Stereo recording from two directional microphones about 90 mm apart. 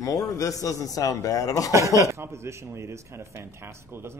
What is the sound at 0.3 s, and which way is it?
A man's voice, 40° left (ahead or behind).